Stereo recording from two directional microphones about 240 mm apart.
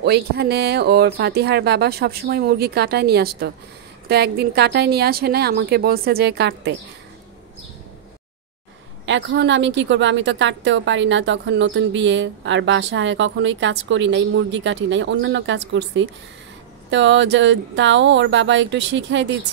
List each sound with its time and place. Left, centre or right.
0.0 s speech: right
9.0 s a woman's voice: right